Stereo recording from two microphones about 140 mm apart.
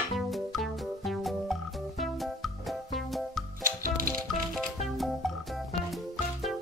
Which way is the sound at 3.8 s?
90° right.